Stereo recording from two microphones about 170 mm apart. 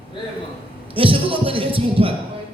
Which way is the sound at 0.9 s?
30° right (ahead or behind).